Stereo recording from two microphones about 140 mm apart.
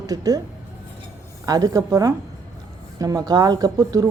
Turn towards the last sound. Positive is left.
turn(degrees=-25)  # may be behind; listen again after turning